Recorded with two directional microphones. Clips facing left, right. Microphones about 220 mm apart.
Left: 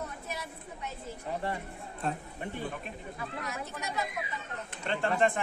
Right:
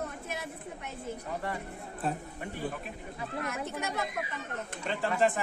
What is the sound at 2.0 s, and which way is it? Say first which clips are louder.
Speech: right 1 dB; 5° right (ahead or behind).